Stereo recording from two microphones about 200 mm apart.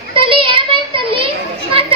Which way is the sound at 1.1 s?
25° right (ahead or behind).